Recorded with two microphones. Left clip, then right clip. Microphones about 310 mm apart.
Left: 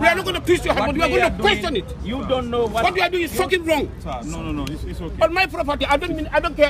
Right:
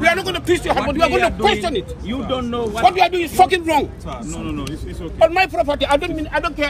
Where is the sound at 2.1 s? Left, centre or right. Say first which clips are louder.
Left 2 dB; left.